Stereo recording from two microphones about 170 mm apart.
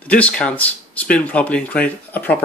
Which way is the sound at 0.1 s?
5° left (ahead or behind).